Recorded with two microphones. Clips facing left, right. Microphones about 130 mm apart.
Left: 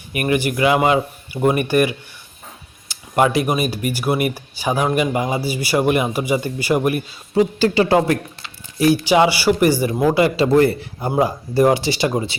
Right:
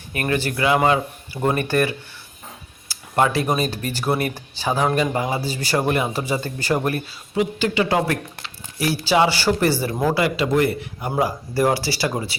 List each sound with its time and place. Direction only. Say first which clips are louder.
0.1 s speech: left 4 dB; 15° left (ahead or behind)
7.3 s a man's voice: left 5 dB; 35° left (ahead or behind); by 9.9 s 15° left (ahead or behind)
10.2 s a man's voice: left 6 dB; 30° left (ahead or behind)